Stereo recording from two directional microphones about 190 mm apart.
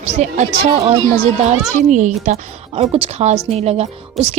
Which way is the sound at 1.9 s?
40° right (ahead or behind).